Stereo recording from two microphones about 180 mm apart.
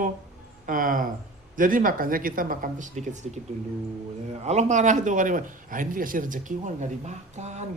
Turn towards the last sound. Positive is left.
turn(degrees=-40)  # may be behind; listen again after turning